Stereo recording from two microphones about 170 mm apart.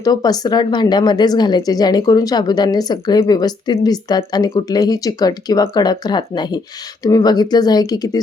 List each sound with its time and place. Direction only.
0.0 s speech: 20° left (ahead or behind)